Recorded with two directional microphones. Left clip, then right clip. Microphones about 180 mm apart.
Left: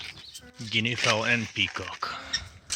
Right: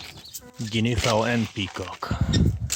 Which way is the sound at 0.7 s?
30° right (ahead or behind).